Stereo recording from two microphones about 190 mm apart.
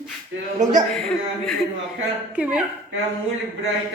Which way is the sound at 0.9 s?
5° left (ahead or behind).